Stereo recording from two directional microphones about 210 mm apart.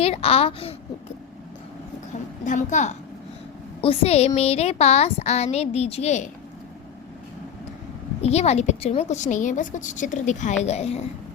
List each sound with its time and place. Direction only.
0.0 s a woman's voice: 30° left (ahead or behind)
2.4 s a woman's voice: 35° left (ahead or behind)
8.2 s a woman's voice: 30° left (ahead or behind)